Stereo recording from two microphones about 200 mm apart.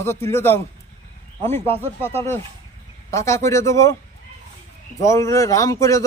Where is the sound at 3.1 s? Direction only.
15° left (ahead or behind).